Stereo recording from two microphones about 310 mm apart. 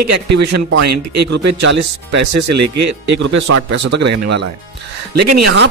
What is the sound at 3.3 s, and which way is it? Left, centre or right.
Speech, right.